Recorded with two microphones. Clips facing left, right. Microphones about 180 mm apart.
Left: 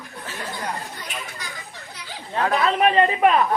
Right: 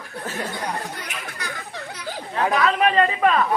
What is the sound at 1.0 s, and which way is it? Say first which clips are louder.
Chatter: right 1 dB; 65° right (ahead or behind).